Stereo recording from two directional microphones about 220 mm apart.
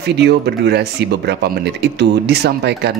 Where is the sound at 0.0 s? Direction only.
50° right (ahead or behind).